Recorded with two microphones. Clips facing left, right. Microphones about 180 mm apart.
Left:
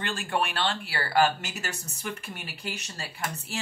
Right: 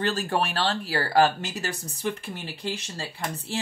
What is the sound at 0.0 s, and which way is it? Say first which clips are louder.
Speech: right 4 dB; 40° right (ahead or behind).